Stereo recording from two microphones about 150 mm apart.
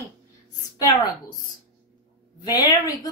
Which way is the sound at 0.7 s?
25° left (ahead or behind).